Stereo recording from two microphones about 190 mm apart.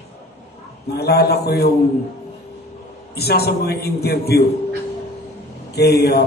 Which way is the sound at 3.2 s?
55° left (ahead or behind).